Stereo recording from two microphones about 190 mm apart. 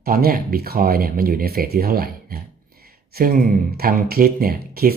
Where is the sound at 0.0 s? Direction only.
50° right (ahead or behind).